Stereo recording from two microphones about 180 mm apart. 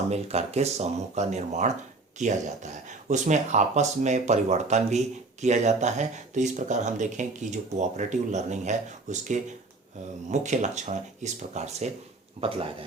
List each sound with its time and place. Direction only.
0.1 s speech: 35° right (ahead or behind)